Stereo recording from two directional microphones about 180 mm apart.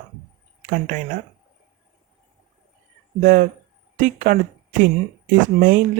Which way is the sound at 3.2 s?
45° right (ahead or behind).